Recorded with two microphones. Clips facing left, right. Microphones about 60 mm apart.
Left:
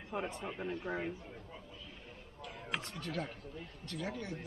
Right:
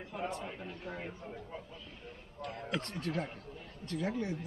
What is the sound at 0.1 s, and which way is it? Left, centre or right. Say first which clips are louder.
Speech: even; centre.